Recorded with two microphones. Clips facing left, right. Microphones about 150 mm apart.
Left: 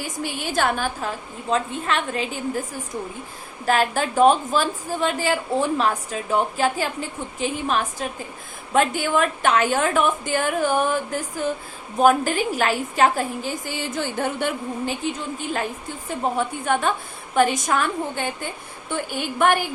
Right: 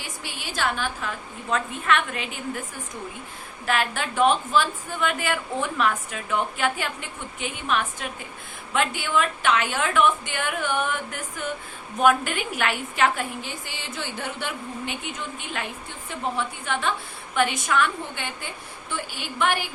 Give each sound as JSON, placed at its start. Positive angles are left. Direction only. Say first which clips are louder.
{"t": 0.0, "sound": "a woman's voice", "louder": "left 8 dB", "side_deg": 45}
{"t": 3.7, "sound": "a woman's voice", "louder": "left 5 dB", "side_deg": 40}
{"t": 16.0, "sound": "a woman's voice", "louder": "left 5 dB", "side_deg": 45}